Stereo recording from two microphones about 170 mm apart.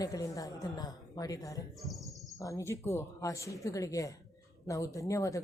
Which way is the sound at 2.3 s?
20° left (ahead or behind).